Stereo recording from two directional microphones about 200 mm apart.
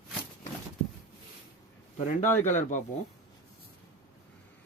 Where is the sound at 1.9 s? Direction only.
40° left (ahead or behind).